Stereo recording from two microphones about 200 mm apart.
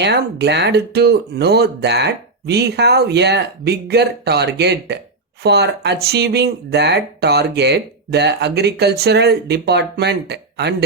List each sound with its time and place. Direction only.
0.0 s speech: 55° right (ahead or behind)